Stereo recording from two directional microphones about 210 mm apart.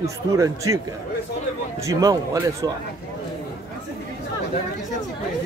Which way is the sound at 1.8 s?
15° right (ahead or behind).